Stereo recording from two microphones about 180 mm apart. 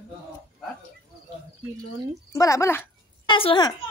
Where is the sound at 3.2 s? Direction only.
30° left (ahead or behind).